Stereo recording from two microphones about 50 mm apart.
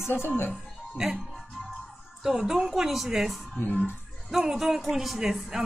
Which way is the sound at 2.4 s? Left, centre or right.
Centre.